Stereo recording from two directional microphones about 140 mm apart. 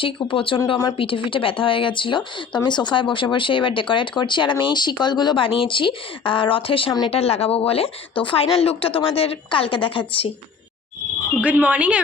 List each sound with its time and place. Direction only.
0.3 s speech: 40° left (ahead or behind)
7.1 s speech: 45° left (ahead or behind)
11.4 s speech: 10° right (ahead or behind)